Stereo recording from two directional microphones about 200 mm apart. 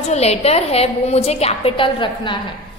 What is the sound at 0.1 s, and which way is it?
A woman's voice, 30° left (ahead or behind).